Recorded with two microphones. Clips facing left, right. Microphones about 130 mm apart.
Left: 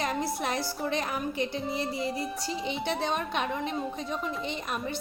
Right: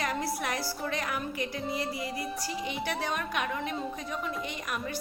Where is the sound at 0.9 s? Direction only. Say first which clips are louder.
Left 3 dB; 25° left (ahead or behind).